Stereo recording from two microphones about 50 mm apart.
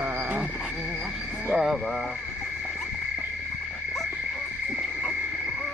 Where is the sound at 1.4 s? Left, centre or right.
Centre.